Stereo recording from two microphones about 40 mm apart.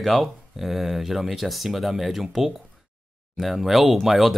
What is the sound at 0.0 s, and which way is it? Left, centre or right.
A man's voice, centre.